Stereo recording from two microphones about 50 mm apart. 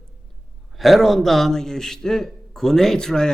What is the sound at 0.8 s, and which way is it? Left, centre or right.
A man's voice, centre.